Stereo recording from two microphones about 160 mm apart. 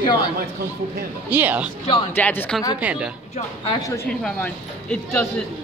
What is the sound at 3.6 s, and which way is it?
Speech, 25° left (ahead or behind).